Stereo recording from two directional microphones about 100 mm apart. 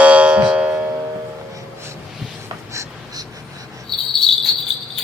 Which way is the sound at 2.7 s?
30° right (ahead or behind).